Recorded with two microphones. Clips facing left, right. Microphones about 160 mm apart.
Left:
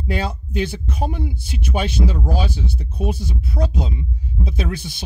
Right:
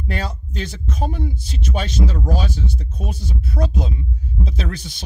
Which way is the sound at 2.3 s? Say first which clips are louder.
Even; 60° left (ahead or behind).